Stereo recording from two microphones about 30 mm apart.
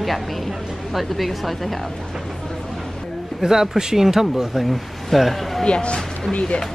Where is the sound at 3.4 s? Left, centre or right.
Centre.